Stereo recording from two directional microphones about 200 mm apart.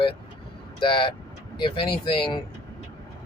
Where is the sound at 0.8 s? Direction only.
25° left (ahead or behind).